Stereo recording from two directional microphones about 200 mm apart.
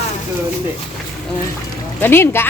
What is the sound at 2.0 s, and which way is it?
Speech, 10° left (ahead or behind).